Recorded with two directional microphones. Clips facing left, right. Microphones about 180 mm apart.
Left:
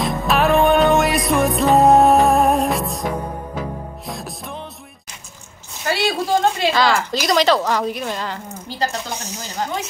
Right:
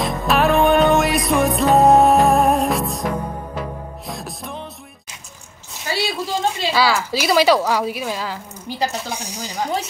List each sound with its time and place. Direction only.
0.0 s music: centre (ahead or behind)
5.9 s a sound: 60° left (ahead or behind)
6.7 s speech: 5° right (ahead or behind)